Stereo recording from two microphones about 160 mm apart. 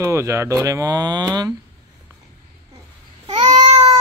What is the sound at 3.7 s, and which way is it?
Cat, 45° right (ahead or behind).